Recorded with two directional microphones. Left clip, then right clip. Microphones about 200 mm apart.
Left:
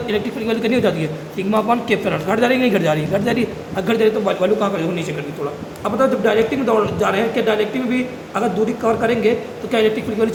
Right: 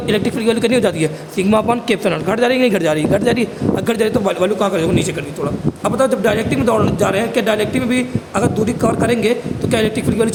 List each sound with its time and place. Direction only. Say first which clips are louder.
0.1 s a man's voice: right 6 dB; 55° right (ahead or behind)